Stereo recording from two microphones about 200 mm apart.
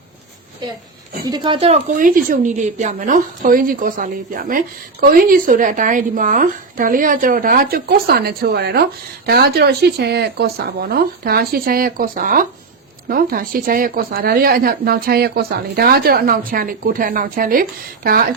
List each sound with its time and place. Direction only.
1.2 s speech: 20° right (ahead or behind)
2.0 s speech: 45° right (ahead or behind)